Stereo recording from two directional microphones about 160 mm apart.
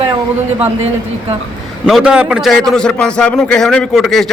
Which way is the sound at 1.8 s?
5° right (ahead or behind).